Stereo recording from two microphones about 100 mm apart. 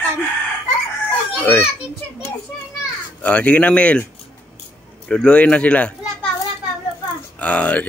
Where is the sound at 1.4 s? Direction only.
20° left (ahead or behind).